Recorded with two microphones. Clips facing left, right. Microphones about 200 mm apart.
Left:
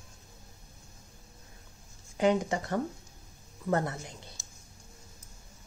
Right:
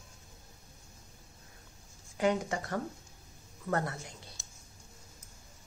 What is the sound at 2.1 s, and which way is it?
Speech, 20° left (ahead or behind).